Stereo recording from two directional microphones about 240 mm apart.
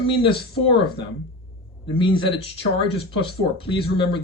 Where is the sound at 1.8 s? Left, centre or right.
Centre.